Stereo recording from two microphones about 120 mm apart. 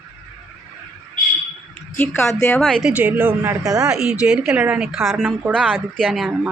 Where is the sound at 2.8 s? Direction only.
15° right (ahead or behind).